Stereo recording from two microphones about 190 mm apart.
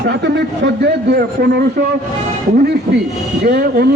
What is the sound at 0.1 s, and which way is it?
A man's voice, 65° right (ahead or behind).